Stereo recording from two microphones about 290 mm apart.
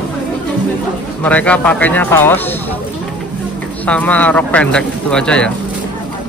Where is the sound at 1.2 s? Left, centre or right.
Centre.